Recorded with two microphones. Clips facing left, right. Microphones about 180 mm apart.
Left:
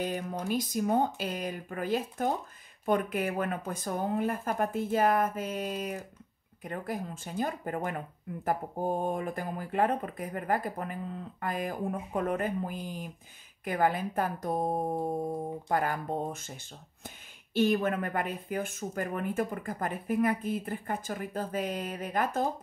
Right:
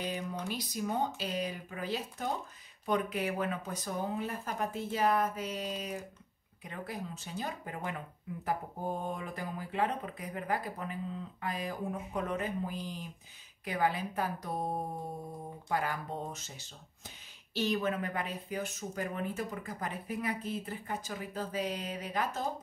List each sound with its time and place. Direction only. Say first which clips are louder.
0.0 s speech: left 4 dB; 50° left (ahead or behind)